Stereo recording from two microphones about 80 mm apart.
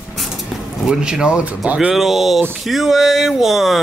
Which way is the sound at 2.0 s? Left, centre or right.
Centre.